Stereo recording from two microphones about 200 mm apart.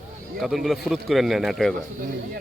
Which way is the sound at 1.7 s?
45° right (ahead or behind).